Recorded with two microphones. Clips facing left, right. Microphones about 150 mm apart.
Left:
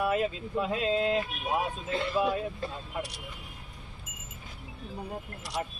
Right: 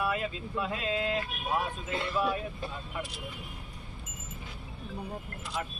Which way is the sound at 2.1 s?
20° left (ahead or behind).